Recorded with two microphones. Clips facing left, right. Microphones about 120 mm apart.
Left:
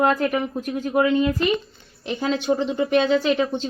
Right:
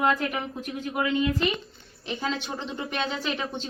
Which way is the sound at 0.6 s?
45° left (ahead or behind).